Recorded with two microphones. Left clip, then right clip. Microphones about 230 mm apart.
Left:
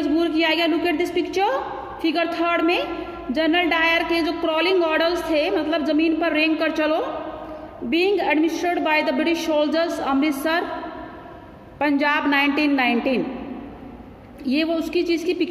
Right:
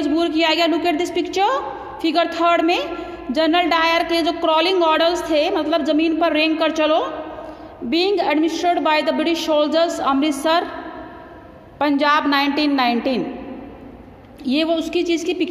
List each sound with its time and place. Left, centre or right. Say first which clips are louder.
0.0 s a woman's voice: right 2 dB; centre
11.8 s a woman's voice: right 3 dB; right
14.4 s a woman's voice: right 3 dB; centre